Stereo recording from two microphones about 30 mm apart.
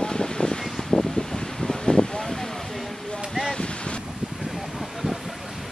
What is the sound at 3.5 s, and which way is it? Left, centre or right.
Wind, left.